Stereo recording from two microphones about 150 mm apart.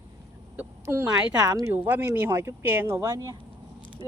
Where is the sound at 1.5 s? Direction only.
15° right (ahead or behind).